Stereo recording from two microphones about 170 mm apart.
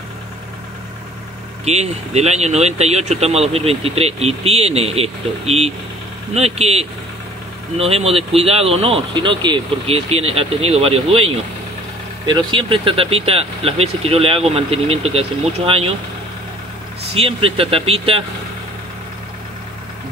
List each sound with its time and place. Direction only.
1.6 s speech: 40° right (ahead or behind)
17.1 s speech: 35° right (ahead or behind)